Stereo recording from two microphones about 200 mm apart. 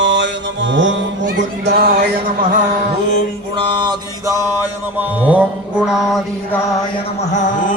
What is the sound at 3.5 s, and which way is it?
Mantra, 20° right (ahead or behind).